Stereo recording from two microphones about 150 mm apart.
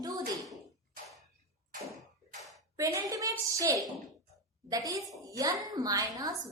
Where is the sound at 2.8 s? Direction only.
20° right (ahead or behind).